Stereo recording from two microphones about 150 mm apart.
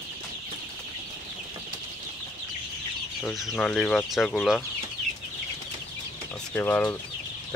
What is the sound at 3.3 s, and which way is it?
Speech, centre (ahead or behind).